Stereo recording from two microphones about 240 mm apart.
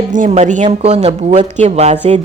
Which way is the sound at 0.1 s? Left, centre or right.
Right.